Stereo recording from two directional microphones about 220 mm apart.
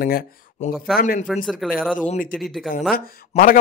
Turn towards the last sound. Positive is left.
turn(degrees=40)  # may be behind; listen again after turning